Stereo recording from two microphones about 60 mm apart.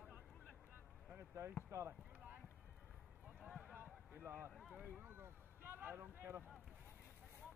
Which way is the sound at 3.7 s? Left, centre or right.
Right.